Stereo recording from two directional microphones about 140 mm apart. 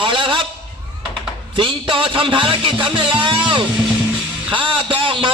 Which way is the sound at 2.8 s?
35° right (ahead or behind).